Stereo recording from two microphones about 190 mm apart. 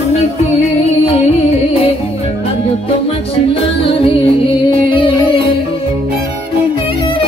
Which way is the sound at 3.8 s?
30° left (ahead or behind).